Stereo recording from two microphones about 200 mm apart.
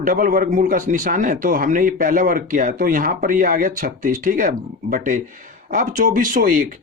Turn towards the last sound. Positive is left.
turn(degrees=-40)  # may be behind; listen again after turning